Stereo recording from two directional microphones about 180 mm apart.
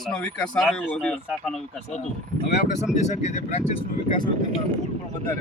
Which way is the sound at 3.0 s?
40° left (ahead or behind).